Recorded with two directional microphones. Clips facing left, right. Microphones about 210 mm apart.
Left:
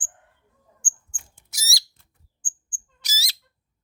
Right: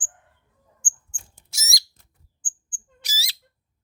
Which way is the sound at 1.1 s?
40° right (ahead or behind).